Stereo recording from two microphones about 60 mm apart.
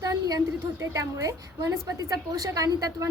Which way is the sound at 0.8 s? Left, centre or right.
Right.